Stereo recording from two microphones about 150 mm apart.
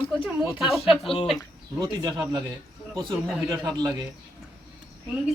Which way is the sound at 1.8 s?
25° right (ahead or behind).